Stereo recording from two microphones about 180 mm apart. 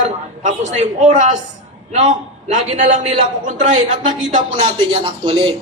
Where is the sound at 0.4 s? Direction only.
40° right (ahead or behind).